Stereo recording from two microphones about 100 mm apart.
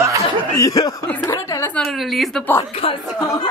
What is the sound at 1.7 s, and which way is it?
Chopping, centre (ahead or behind).